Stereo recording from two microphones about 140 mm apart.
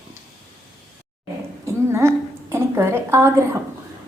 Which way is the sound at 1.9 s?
20° right (ahead or behind).